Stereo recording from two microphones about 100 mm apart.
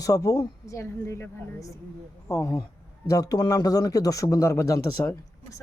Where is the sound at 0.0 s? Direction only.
35° left (ahead or behind).